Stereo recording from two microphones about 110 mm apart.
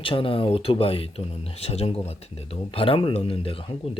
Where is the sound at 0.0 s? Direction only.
55° left (ahead or behind).